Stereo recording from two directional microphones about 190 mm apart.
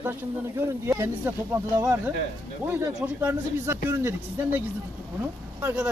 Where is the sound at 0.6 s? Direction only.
15° right (ahead or behind).